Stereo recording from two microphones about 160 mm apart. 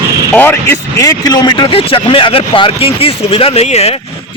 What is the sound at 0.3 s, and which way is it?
Speech, 15° left (ahead or behind).